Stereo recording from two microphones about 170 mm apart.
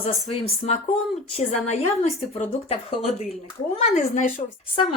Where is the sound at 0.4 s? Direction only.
35° left (ahead or behind).